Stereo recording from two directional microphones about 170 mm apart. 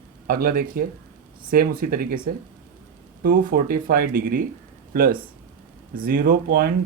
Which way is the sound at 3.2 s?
60° right (ahead or behind).